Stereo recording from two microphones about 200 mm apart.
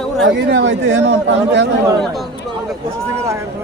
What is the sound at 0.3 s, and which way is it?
Speech, 60° right (ahead or behind).